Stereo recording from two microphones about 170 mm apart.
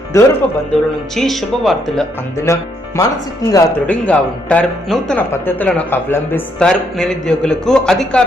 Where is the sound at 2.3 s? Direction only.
15° left (ahead or behind).